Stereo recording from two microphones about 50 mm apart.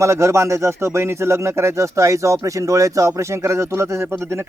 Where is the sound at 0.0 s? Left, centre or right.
Right.